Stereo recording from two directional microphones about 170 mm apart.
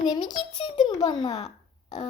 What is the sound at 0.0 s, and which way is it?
A child's voice, 25° left (ahead or behind).